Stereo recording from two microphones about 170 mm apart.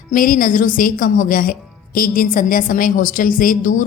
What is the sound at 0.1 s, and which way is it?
Speech, 50° left (ahead or behind).